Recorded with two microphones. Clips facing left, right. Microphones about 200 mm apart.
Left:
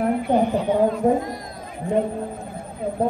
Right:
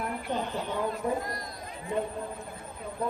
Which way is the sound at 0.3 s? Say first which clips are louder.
Left 12 dB; 60° left (ahead or behind).